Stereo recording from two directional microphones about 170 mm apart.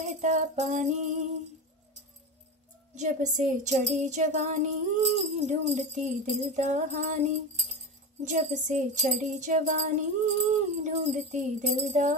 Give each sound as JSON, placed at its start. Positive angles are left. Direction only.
{"t": 0.0, "sound": "music", "side_deg": -45}
{"t": 2.9, "sound": "music", "side_deg": -45}